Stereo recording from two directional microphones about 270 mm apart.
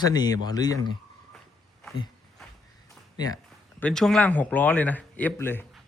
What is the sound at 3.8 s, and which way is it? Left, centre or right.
Speech, centre.